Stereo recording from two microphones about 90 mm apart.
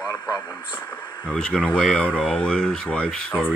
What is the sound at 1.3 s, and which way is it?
Speech, 5° left (ahead or behind).